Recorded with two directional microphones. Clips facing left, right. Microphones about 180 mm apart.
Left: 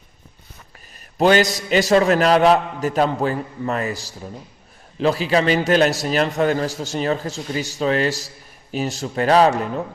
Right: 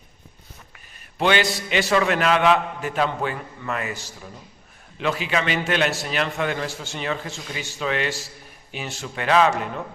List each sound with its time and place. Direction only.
1.2 s a man's voice: 40° left (ahead or behind)